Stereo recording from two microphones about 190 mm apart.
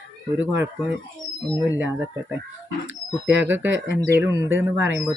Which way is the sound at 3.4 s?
10° right (ahead or behind).